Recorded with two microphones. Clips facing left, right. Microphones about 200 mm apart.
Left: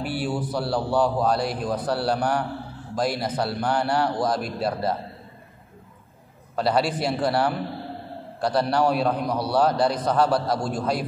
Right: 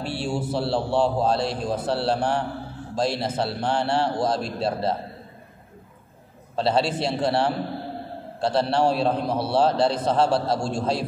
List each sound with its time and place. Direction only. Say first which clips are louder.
0.0 s a man's voice: even; 25° right (ahead or behind)
6.5 s a man's voice: even; 25° right (ahead or behind)